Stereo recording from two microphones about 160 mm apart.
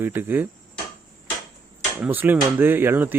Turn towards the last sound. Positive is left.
turn(degrees=-15)  # may be behind; listen again after turning